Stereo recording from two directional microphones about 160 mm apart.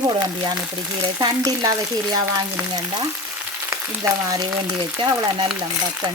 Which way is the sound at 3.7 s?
20° right (ahead or behind).